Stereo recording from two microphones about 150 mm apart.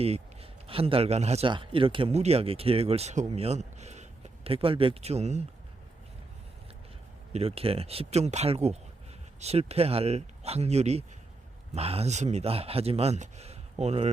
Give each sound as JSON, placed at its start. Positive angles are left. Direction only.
{"t": 0.0, "sound": "a man's voice", "side_deg": -40}
{"t": 7.3, "sound": "speech", "side_deg": -40}